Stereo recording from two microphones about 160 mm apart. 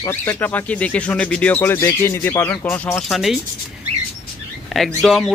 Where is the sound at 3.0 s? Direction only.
Centre (ahead or behind).